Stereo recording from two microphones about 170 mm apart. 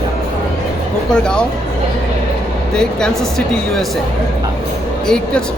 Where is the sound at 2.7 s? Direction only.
5° left (ahead or behind).